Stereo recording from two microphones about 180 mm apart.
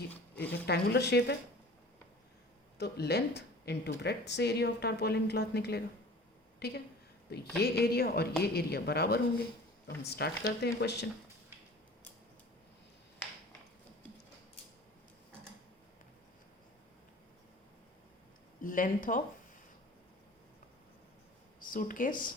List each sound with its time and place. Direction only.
0.6 s a woman's voice: 65° left (ahead or behind)
2.7 s a woman's voice: 65° left (ahead or behind)
18.6 s speech: 50° left (ahead or behind)
21.6 s speech: 50° left (ahead or behind)